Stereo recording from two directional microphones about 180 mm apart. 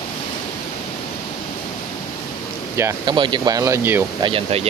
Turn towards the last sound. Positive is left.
turn(degrees=-30)  # may be behind; listen again after turning